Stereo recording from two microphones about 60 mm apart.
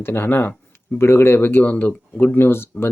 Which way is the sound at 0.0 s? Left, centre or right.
Left.